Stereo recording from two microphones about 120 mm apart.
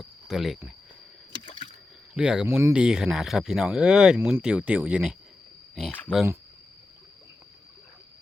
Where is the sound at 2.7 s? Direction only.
5° right (ahead or behind).